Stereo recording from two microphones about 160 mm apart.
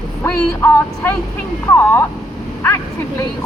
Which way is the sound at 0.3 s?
15° left (ahead or behind).